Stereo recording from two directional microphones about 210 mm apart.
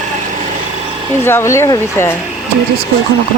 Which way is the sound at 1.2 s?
10° left (ahead or behind).